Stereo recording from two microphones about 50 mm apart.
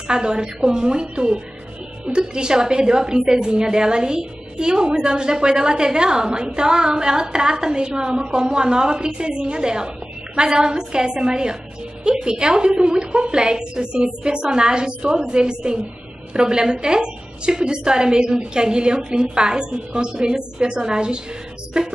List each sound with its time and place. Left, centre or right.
0.1 s a woman's voice: centre